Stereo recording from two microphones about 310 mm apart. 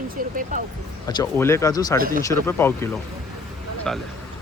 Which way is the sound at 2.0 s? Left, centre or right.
Right.